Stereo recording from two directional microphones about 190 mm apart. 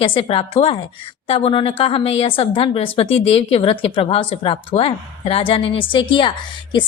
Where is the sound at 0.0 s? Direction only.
25° left (ahead or behind).